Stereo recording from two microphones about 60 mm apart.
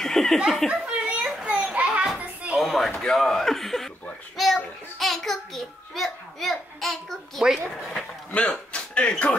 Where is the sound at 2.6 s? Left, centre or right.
Centre.